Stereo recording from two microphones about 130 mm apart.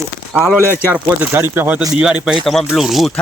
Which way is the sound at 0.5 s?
15° right (ahead or behind).